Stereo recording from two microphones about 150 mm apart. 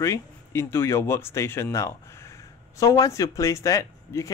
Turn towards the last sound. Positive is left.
turn(degrees=20)  # may be behind; listen again after turning